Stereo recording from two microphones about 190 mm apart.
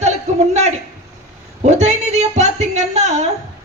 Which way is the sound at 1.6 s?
35° right (ahead or behind).